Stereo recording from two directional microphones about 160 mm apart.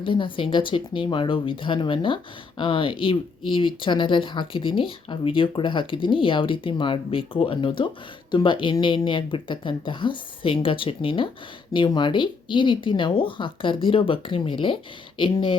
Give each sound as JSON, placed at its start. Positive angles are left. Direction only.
{"t": 0.0, "sound": "speech", "side_deg": 30}